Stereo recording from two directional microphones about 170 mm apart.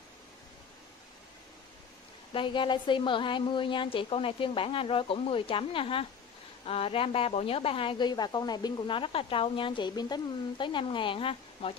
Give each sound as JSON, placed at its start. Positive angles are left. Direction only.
{"t": 2.3, "sound": "a woman's voice", "side_deg": 30}